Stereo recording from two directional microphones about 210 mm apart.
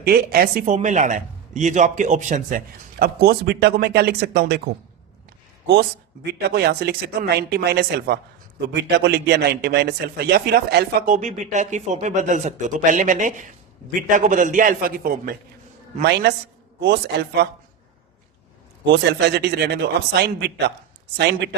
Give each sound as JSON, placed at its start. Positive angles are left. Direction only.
{"t": 0.0, "sound": "a man's voice", "side_deg": -45}
{"t": 6.5, "sound": "a man's voice", "side_deg": -50}
{"t": 19.2, "sound": "a man's voice", "side_deg": -50}